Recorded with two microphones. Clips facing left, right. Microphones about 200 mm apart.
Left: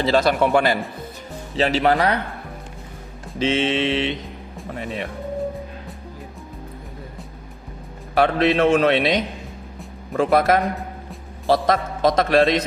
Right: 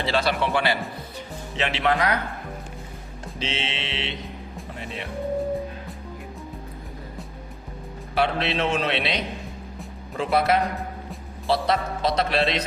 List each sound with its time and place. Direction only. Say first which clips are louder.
0.0 s a man's voice: left 6 dB; 45° left (ahead or behind)
3.3 s a man's voice: left 11 dB; 50° left (ahead or behind)
8.1 s a man's voice: left 6 dB; 50° left (ahead or behind)